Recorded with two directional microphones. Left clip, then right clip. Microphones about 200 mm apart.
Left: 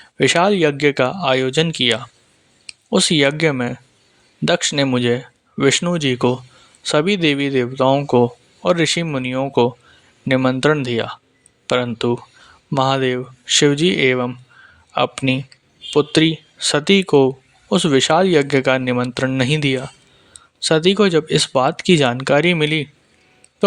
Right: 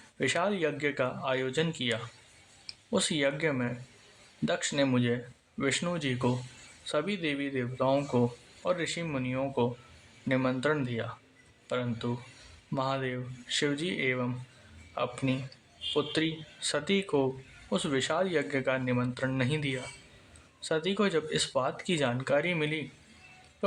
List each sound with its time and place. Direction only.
0.2 s speech: 40° left (ahead or behind)